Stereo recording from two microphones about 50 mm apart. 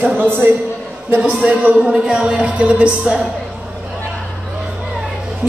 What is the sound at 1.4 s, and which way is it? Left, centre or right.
A woman's voice, right.